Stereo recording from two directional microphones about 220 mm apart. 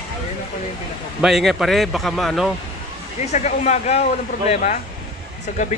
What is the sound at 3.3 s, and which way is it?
Speech, 30° left (ahead or behind).